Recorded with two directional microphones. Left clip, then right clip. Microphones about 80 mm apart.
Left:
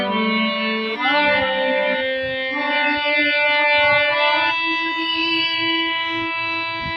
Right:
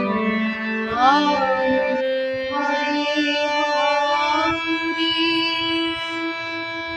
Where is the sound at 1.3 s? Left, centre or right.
Right.